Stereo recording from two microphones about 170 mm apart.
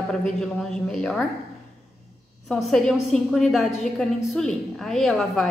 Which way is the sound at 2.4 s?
Centre (ahead or behind).